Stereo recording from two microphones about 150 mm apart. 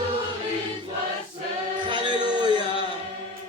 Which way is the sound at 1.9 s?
30° right (ahead or behind).